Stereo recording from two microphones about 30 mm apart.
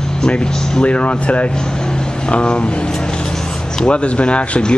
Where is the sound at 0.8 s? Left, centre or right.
Left.